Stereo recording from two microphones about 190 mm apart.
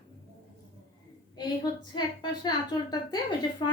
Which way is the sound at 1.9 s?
20° left (ahead or behind).